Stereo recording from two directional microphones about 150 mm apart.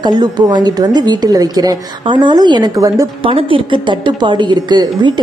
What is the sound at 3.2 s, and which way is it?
A woman's voice, 35° right (ahead or behind).